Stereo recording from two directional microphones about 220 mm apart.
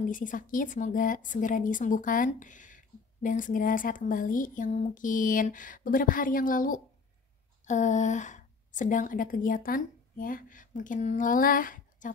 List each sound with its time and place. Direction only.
0.1 s a woman's voice: 35° left (ahead or behind)